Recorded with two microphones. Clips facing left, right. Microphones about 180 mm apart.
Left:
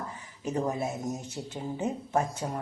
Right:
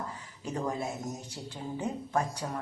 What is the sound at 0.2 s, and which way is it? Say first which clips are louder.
Speech: left 7 dB; 20° left (ahead or behind).